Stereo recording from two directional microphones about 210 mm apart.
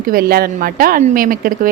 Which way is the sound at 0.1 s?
45° right (ahead or behind).